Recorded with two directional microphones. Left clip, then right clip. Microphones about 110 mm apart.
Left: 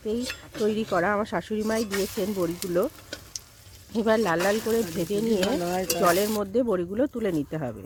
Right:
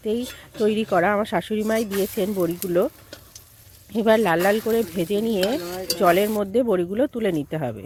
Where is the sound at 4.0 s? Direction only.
20° right (ahead or behind).